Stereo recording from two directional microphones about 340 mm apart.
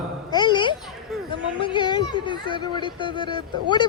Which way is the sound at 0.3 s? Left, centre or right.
Centre.